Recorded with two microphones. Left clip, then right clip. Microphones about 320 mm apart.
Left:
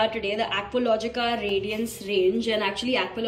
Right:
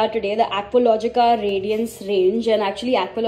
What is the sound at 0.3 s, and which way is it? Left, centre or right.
Speech, left.